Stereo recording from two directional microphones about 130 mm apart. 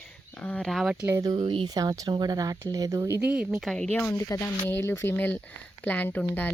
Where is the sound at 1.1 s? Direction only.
25° right (ahead or behind).